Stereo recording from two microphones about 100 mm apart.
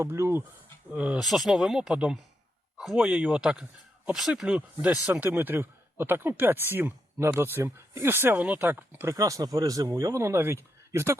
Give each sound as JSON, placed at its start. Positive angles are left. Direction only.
{"t": 0.0, "sound": "speech", "side_deg": -25}
{"t": 0.9, "sound": "speech", "side_deg": -10}
{"t": 1.2, "sound": "speech", "side_deg": 0}
{"t": 9.1, "sound": "speech", "side_deg": -35}